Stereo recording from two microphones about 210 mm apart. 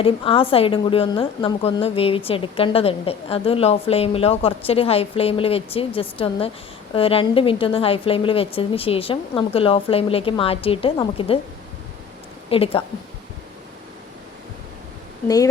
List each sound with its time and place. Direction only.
0.0 s a woman's voice: 25° left (ahead or behind)
12.5 s a woman's voice: 25° left (ahead or behind)